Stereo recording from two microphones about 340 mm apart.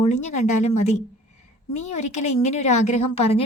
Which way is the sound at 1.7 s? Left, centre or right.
Left.